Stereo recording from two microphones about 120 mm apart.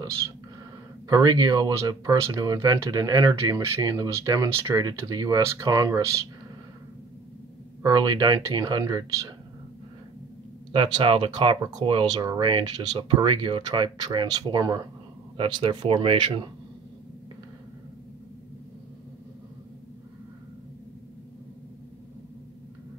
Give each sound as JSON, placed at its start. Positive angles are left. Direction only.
{"t": 1.0, "sound": "speech", "side_deg": -35}
{"t": 7.8, "sound": "speech", "side_deg": -40}
{"t": 10.7, "sound": "speech", "side_deg": -45}
{"t": 15.3, "sound": "speech", "side_deg": -45}